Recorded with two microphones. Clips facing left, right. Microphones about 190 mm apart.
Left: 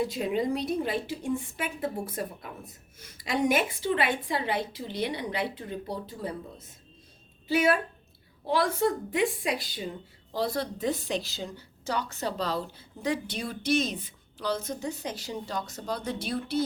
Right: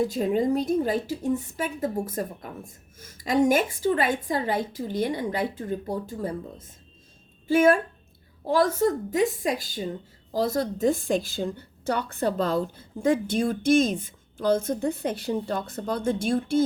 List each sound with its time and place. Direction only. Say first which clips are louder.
0.0 s a woman's voice: right 4 dB; 45° right (ahead or behind)